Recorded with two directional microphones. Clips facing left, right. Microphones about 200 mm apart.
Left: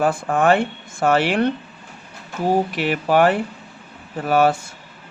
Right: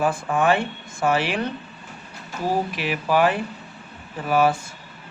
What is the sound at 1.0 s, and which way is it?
Speech, 70° left (ahead or behind).